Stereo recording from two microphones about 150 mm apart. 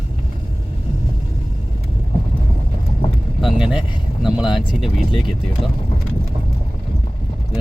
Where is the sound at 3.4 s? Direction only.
5° right (ahead or behind).